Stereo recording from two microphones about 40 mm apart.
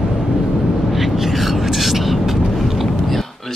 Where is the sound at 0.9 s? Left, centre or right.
Centre.